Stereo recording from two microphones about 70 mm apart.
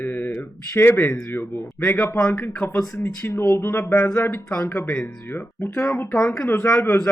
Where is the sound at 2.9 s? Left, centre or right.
Left.